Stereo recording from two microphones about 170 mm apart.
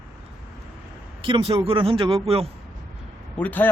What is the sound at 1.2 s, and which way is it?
Speech, 30° right (ahead or behind).